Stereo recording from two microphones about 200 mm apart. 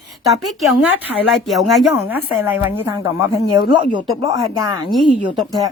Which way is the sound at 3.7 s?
25° right (ahead or behind).